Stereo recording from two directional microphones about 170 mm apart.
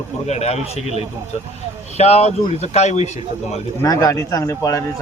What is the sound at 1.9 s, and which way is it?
A man's voice, 40° left (ahead or behind).